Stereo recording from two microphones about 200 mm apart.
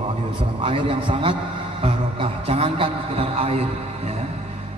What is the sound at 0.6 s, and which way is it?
A man's voice, 25° right (ahead or behind).